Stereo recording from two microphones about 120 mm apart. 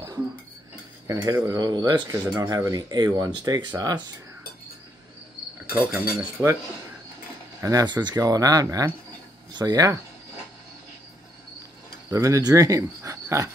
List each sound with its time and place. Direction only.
1.0 s speech: 25° right (ahead or behind)
5.7 s cricket: 15° right (ahead or behind)
6.4 s speech: 25° right (ahead or behind)
7.6 s speech: 35° right (ahead or behind)
12.1 s speech: 25° right (ahead or behind)